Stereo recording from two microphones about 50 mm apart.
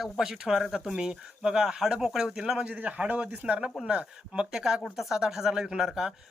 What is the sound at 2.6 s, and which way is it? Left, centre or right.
Speech, right.